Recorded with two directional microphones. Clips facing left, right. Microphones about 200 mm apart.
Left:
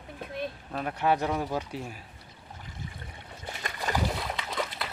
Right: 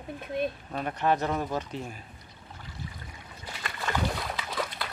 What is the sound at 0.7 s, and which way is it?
Speech, centre (ahead or behind).